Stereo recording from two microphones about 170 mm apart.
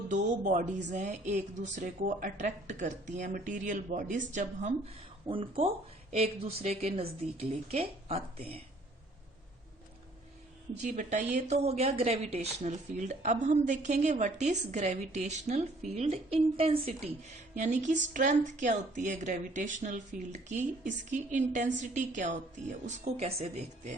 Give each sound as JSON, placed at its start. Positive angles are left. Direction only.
{"t": 0.1, "sound": "a woman's voice", "side_deg": -45}
{"t": 5.3, "sound": "a woman's voice", "side_deg": -30}
{"t": 10.8, "sound": "a woman's voice", "side_deg": -45}
{"t": 17.5, "sound": "a woman's voice", "side_deg": -45}